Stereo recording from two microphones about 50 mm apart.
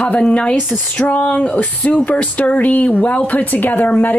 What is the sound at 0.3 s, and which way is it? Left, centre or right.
Speech, left.